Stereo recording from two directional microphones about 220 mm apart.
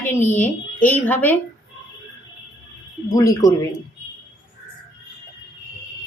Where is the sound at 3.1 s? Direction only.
15° left (ahead or behind).